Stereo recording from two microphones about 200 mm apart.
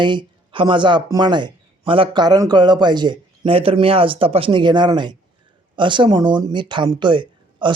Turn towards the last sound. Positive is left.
turn(degrees=-25)  # may be behind; listen again after turning